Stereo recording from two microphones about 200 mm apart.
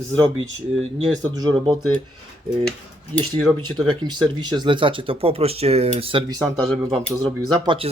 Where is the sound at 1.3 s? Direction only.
20° right (ahead or behind).